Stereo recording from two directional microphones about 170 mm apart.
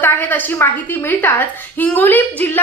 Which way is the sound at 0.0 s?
10° left (ahead or behind).